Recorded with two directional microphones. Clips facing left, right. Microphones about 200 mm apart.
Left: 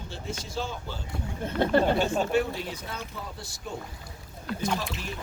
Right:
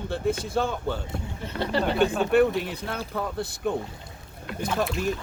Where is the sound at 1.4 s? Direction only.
50° left (ahead or behind).